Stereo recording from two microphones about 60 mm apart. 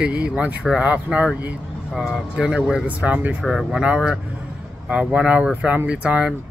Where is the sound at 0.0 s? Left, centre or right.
Centre.